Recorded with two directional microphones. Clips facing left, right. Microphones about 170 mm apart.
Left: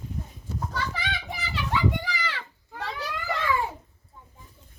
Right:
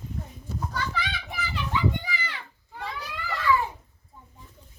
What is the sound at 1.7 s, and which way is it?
Children playing, 80° left.